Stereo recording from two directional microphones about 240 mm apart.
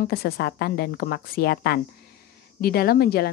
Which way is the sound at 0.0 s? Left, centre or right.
Left.